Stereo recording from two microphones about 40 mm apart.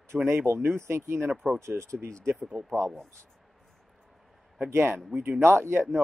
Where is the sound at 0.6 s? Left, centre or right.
Right.